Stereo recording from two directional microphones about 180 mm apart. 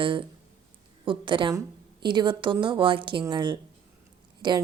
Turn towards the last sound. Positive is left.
turn(degrees=-25)  # may be behind; listen again after turning